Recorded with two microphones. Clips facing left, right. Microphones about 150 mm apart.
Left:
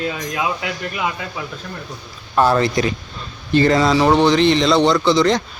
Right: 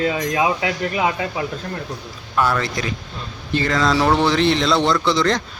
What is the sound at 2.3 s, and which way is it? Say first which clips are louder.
Speech: left 5 dB; 25° left (ahead or behind).